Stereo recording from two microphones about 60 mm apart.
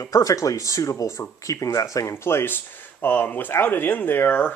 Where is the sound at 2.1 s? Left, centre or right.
Left.